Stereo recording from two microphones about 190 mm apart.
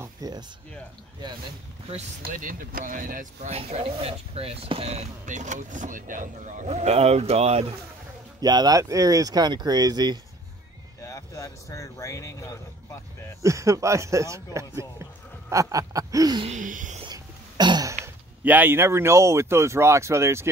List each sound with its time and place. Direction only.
0.0 s a sound: 20° right (ahead or behind)
2.2 s speech: 45° right (ahead or behind)
3.5 s speech: 30° right (ahead or behind)
8.4 s speech: 20° right (ahead or behind)
11.0 s speech: 15° left (ahead or behind)
13.4 s speech: 15° right (ahead or behind)
16.4 s speech: 40° right (ahead or behind)
17.0 s speech: 25° right (ahead or behind)